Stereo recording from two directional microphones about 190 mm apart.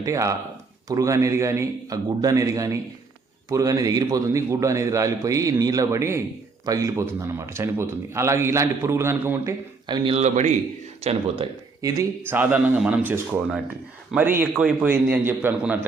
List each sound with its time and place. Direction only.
0.0 s a man's voice: 15° right (ahead or behind)
9.8 s speech: 25° right (ahead or behind)
11.8 s a man's voice: 15° right (ahead or behind)